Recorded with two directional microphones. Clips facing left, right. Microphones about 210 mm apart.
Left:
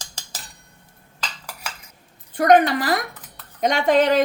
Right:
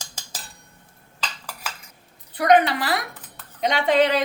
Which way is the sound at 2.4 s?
45° left (ahead or behind).